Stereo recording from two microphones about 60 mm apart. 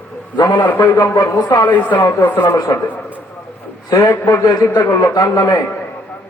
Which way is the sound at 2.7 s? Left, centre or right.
Left.